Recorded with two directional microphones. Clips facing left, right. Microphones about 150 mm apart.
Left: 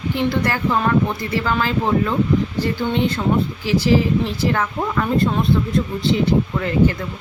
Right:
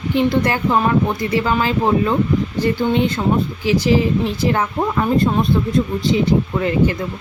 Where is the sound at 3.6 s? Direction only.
15° right (ahead or behind).